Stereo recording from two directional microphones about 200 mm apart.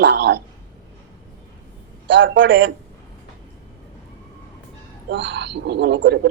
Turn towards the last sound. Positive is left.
turn(degrees=-60)  # may be behind; listen again after turning